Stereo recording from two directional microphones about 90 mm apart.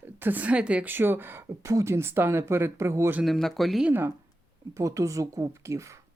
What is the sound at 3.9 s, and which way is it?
Speech, 25° right (ahead or behind).